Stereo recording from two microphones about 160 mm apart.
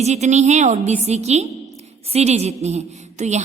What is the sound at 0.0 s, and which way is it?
A woman's voice, 45° right (ahead or behind).